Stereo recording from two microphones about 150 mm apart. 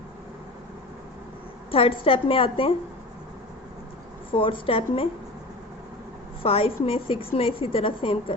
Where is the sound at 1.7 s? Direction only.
35° left (ahead or behind).